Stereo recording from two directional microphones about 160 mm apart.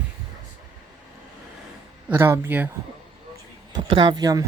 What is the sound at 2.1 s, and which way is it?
Speech, 15° right (ahead or behind).